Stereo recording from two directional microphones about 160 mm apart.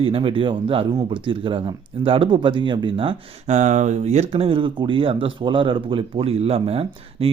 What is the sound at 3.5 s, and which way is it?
Speech, 45° right (ahead or behind).